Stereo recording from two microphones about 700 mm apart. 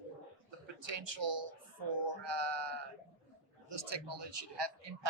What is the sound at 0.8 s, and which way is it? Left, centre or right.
Speech, right.